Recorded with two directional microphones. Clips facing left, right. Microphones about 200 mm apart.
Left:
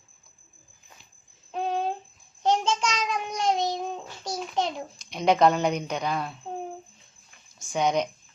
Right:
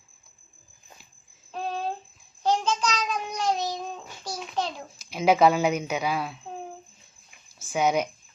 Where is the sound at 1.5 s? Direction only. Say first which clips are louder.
Left 4 dB; 20° left (ahead or behind).